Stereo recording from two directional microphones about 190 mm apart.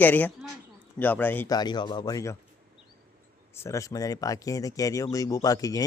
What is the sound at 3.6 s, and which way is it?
Speech, 15° left (ahead or behind).